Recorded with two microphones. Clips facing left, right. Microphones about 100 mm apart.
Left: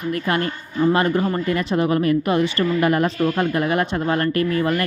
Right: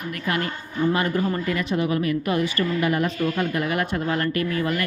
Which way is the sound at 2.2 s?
25° left (ahead or behind).